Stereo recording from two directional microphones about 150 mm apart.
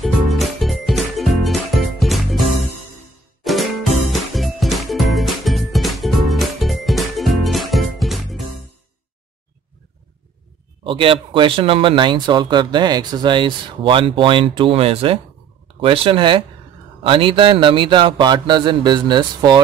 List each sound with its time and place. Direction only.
0.0 s music: centre (ahead or behind)
3.4 s music: centre (ahead or behind)
10.8 s speech: 35° right (ahead or behind)